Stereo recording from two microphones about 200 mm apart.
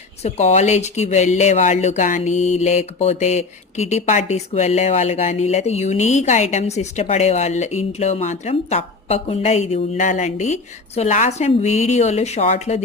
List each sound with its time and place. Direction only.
0.2 s speech: 30° left (ahead or behind)